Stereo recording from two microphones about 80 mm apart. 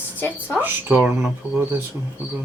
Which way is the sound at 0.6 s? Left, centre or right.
Right.